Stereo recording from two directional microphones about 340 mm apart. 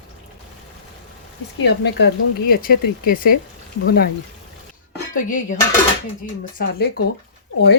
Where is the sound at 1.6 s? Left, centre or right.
Left.